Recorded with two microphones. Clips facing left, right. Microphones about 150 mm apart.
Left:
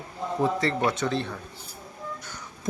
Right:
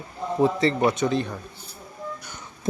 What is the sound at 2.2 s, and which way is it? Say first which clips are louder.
Music: right 1 dB; 20° right (ahead or behind).